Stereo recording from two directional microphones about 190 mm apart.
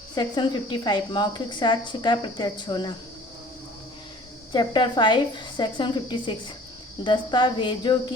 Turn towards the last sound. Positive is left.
turn(degrees=25)  # may be behind; listen again after turning